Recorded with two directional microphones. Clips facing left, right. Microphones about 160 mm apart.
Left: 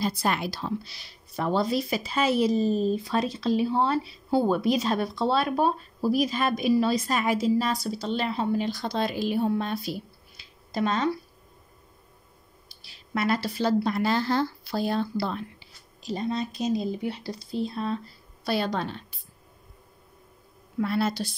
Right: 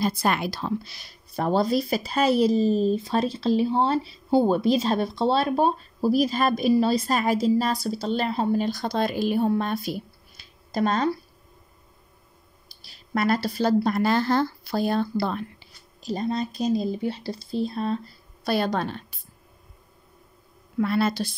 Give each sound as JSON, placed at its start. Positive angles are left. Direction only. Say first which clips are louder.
{"t": 0.0, "sound": "speech", "louder": "right 3 dB", "side_deg": -55}
{"t": 12.8, "sound": "speech", "louder": "right 3 dB", "side_deg": -40}
{"t": 16.1, "sound": "speech", "louder": "right 2 dB", "side_deg": -40}
{"t": 18.4, "sound": "speech", "louder": "right 3 dB", "side_deg": -50}
{"t": 20.8, "sound": "speech", "louder": "right 3 dB", "side_deg": -70}